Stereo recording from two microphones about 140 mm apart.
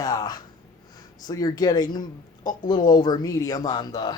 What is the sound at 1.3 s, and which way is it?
Speech, 25° left (ahead or behind).